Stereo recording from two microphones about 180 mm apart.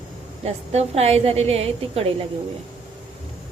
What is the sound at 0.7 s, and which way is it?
A woman's voice, 35° right (ahead or behind).